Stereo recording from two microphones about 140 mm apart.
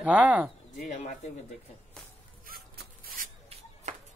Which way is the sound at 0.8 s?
60° left (ahead or behind).